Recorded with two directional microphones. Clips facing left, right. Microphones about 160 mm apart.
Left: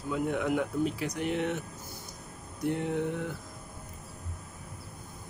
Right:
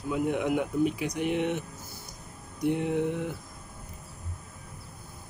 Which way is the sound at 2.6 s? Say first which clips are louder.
Right 3 dB; 15° right (ahead or behind).